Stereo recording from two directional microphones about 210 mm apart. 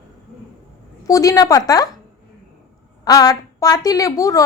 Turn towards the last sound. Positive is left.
turn(degrees=15)  # may be behind; listen again after turning